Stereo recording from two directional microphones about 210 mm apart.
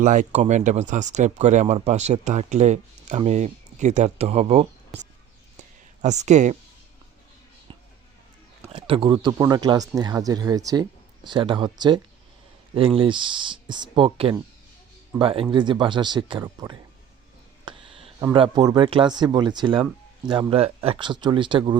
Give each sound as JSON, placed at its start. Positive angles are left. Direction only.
{"t": 0.0, "sound": "speech", "side_deg": -35}
{"t": 6.0, "sound": "speech", "side_deg": -35}
{"t": 8.7, "sound": "speech", "side_deg": -25}
{"t": 13.0, "sound": "speech", "side_deg": -25}
{"t": 17.7, "sound": "a sound", "side_deg": -25}
{"t": 18.3, "sound": "speech", "side_deg": -25}